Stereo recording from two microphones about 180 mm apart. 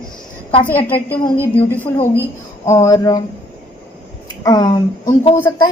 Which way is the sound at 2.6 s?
15° left (ahead or behind).